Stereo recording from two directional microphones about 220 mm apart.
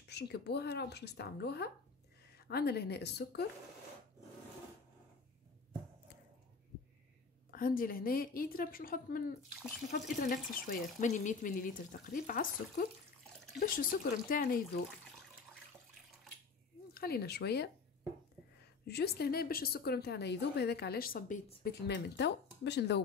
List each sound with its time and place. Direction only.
0.1 s a woman's voice: 50° left (ahead or behind)
7.5 s speech: 40° left (ahead or behind)
16.9 s a woman's voice: 45° left (ahead or behind)
18.9 s a woman's voice: 45° left (ahead or behind)